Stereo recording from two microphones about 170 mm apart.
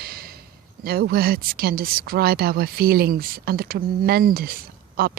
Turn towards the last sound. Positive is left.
turn(degrees=-60)  # may be behind; listen again after turning